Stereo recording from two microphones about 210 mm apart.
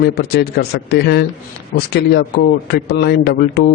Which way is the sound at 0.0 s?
50° left (ahead or behind).